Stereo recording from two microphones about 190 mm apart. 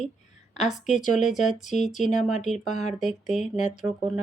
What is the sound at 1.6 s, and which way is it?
Speech, 40° left (ahead or behind).